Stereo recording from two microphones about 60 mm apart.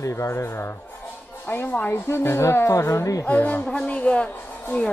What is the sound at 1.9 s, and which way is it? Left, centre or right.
Speech, left.